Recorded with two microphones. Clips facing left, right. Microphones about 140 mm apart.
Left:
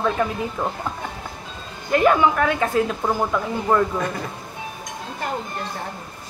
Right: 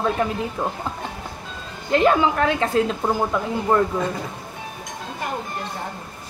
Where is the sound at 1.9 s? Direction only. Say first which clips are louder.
Left 1 dB; 25° right (ahead or behind).